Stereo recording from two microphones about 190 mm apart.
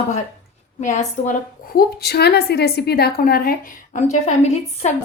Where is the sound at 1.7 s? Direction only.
55° left (ahead or behind).